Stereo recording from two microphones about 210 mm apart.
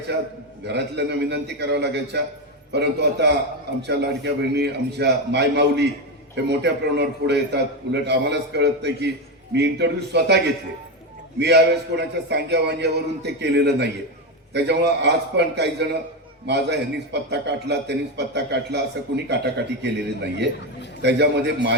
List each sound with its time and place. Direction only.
0.6 s a man's voice: 55° right (ahead or behind)